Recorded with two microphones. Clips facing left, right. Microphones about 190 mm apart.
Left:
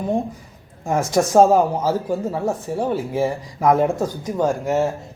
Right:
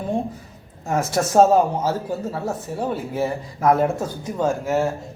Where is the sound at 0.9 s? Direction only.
15° left (ahead or behind).